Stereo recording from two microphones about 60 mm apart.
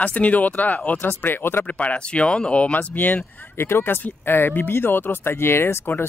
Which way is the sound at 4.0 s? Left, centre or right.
Left.